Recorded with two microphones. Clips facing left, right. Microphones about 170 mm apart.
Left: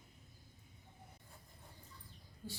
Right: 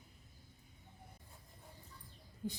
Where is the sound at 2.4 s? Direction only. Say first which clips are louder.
Right 7 dB; 20° right (ahead or behind).